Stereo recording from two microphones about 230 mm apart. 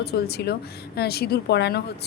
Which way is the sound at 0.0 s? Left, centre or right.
Left.